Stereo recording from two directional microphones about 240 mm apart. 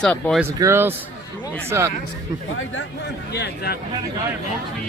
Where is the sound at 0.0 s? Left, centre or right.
Centre.